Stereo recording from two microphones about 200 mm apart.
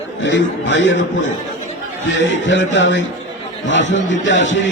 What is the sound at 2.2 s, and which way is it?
A man's voice, 65° left (ahead or behind).